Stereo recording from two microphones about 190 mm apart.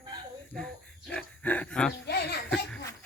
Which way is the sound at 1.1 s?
5° left (ahead or behind).